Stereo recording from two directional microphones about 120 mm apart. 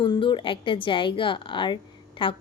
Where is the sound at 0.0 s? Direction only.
45° left (ahead or behind).